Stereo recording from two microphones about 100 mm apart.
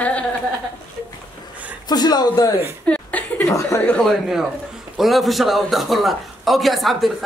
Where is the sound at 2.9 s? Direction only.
15° left (ahead or behind).